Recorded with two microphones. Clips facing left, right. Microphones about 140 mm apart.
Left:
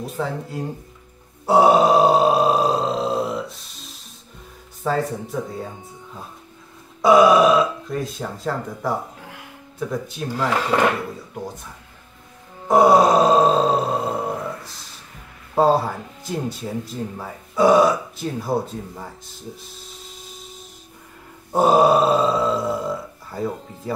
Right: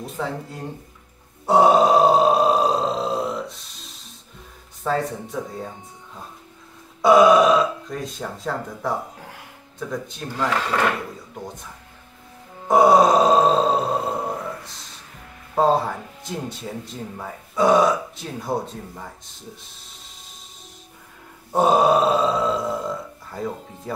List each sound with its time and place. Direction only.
0.0 s speech: centre (ahead or behind)
1.4 s burping: centre (ahead or behind)
4.8 s speech: centre (ahead or behind)
7.0 s speech: centre (ahead or behind)
10.7 s speech: 15° left (ahead or behind)
12.6 s groan: centre (ahead or behind)
15.5 s speech: 5° left (ahead or behind)
21.5 s burping: centre (ahead or behind)